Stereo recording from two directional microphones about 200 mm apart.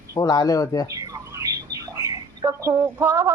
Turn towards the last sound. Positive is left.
turn(degrees=-10)  # may be behind; listen again after turning